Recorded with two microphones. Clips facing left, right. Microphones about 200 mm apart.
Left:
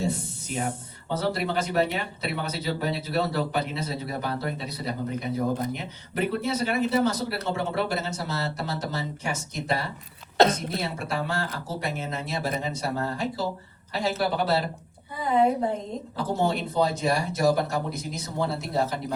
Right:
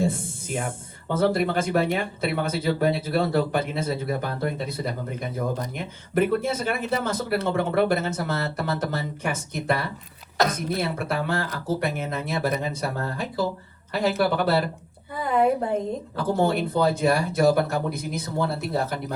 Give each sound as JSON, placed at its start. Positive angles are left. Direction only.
{"t": 0.0, "sound": "speech", "side_deg": -50}
{"t": 10.3, "sound": "a woman's voice", "side_deg": 25}
{"t": 10.8, "sound": "speech", "side_deg": -55}
{"t": 16.1, "sound": "speech", "side_deg": -55}